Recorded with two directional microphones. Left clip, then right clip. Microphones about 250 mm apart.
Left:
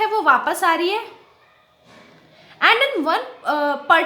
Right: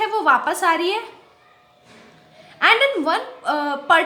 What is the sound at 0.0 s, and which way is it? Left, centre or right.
A woman's voice, centre.